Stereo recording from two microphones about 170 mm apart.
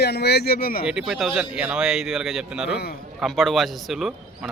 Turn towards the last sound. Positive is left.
turn(degrees=0)  # may be behind; listen again after turning